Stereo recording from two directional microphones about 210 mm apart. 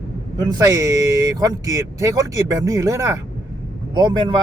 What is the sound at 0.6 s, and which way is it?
Speech, 15° right (ahead or behind).